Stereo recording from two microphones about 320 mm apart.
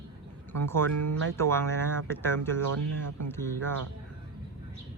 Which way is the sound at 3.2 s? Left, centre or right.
Centre.